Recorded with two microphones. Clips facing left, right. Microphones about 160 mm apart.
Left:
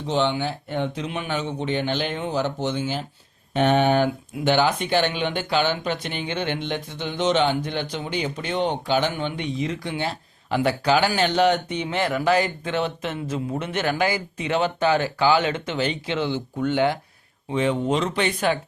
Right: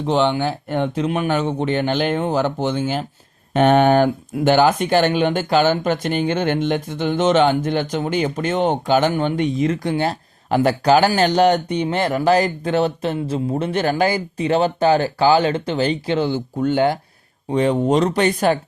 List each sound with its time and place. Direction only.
0.0 s speech: 55° right (ahead or behind)